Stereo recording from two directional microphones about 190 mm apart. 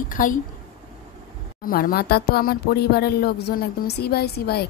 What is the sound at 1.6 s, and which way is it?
Speech, 50° left (ahead or behind).